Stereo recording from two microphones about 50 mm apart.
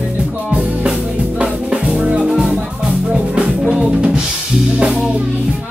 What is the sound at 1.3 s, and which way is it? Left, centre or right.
Music, right.